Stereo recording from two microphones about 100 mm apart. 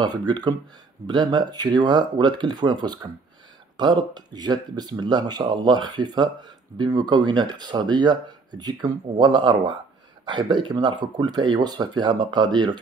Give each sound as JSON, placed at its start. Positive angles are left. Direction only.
{"t": 0.0, "sound": "speech", "side_deg": -45}